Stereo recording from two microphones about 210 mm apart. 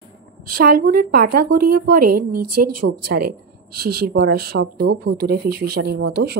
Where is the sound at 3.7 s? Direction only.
45° right (ahead or behind).